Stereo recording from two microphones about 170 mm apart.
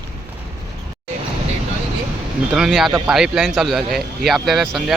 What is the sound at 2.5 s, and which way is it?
Speech, centre (ahead or behind).